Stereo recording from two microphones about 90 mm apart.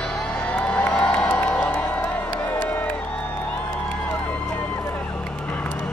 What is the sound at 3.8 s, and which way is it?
Run, 15° left (ahead or behind).